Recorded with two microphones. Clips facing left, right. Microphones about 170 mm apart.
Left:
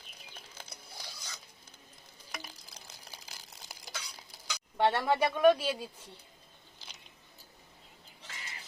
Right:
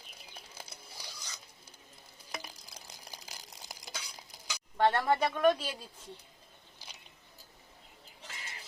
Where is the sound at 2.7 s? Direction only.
10° right (ahead or behind).